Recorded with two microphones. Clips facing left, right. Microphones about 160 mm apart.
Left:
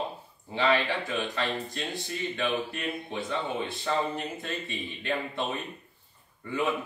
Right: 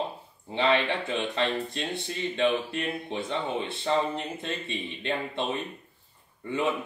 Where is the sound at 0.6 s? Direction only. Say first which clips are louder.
Right 1 dB; 25° right (ahead or behind).